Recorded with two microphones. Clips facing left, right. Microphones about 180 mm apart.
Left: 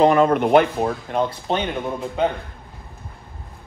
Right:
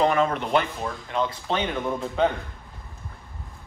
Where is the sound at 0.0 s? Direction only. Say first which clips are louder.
Left 7 dB; 45° left (ahead or behind).